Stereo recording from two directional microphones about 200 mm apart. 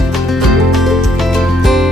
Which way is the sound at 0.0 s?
Centre (ahead or behind).